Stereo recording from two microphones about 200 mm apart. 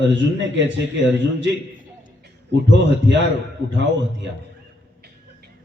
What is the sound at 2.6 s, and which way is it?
A man's voice, 65° right (ahead or behind).